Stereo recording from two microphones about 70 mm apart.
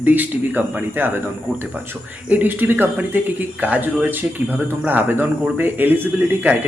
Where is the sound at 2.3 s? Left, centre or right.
Right.